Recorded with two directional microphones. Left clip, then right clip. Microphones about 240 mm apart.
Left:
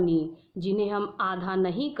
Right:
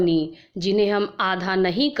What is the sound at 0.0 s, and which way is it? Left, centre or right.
A woman's voice, right.